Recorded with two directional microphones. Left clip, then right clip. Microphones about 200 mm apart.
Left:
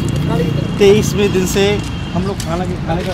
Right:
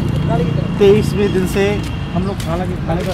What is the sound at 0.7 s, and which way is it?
Speech, 10° left (ahead or behind).